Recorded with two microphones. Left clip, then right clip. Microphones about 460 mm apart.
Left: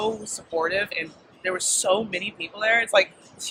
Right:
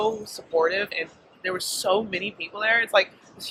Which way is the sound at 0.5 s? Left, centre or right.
Left.